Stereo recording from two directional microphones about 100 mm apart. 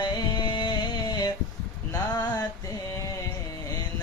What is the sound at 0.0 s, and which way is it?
Music, 50° left (ahead or behind).